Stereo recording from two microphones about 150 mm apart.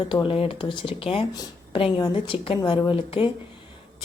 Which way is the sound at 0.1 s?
35° left (ahead or behind).